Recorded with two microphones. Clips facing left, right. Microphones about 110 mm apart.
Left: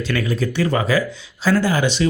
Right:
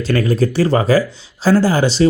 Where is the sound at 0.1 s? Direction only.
40° right (ahead or behind).